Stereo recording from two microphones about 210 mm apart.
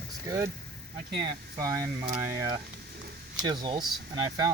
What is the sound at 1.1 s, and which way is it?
Speech, 20° right (ahead or behind).